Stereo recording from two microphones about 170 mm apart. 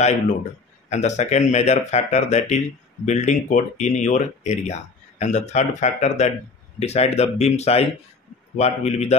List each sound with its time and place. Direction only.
0.8 s speech: 45° left (ahead or behind)